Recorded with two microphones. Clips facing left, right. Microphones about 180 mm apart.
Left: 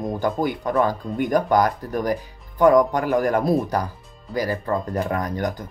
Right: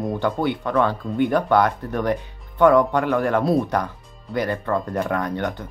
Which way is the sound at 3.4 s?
10° left (ahead or behind).